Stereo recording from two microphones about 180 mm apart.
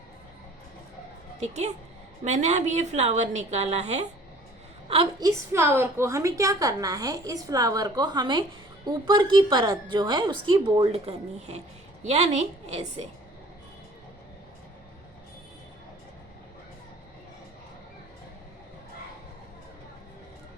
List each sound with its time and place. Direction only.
1.4 s a woman's voice: 40° right (ahead or behind)
5.2 s a woman's voice: 15° right (ahead or behind); by 13.1 s 40° right (ahead or behind)